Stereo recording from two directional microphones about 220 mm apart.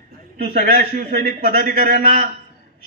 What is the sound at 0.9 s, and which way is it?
Speech, 25° right (ahead or behind).